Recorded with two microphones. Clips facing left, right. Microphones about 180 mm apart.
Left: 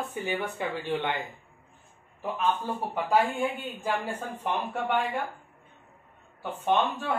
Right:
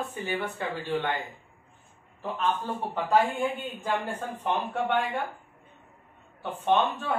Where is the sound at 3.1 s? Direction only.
Centre (ahead or behind).